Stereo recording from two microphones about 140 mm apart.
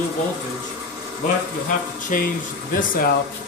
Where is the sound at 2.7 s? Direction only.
80° left.